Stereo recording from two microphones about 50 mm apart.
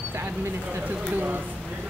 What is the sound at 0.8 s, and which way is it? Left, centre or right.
Speech, right.